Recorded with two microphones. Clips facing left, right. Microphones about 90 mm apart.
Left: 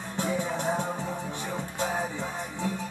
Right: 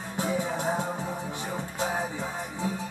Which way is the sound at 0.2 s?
20° right (ahead or behind).